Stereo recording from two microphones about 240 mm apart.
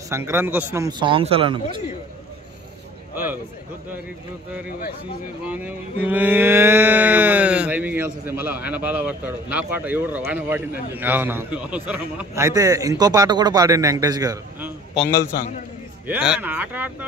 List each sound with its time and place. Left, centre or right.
0.1 s mantra: centre
5.5 s mantra: centre
16.1 s mantra: centre